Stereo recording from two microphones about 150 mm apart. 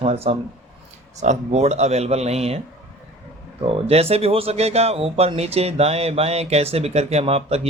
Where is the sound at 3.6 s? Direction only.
40° right (ahead or behind).